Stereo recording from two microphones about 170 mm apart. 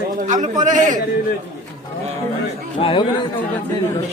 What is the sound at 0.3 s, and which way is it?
Speech, 45° right (ahead or behind).